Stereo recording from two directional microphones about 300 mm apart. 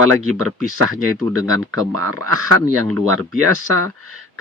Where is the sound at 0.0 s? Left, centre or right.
Right.